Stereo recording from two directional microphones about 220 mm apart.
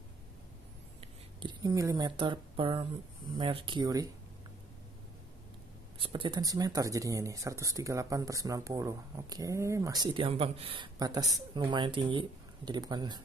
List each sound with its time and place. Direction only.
1.0 s speech: 20° right (ahead or behind)
5.9 s speech: 25° right (ahead or behind)